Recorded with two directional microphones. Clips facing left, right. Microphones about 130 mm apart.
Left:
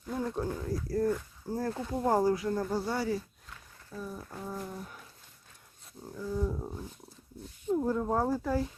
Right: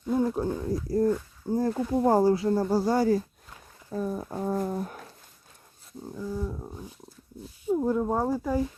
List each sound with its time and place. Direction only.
0.3 s speech: 15° right (ahead or behind); by 5.1 s 60° right (ahead or behind)
6.1 s speech: 15° right (ahead or behind)
6.4 s speech: centre (ahead or behind)
7.7 s speech: 15° right (ahead or behind)